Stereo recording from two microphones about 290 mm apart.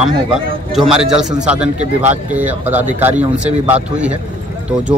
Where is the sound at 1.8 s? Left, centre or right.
Right.